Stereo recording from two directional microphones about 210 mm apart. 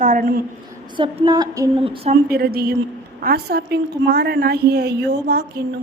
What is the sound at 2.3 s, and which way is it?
A woman's voice, 45° right (ahead or behind).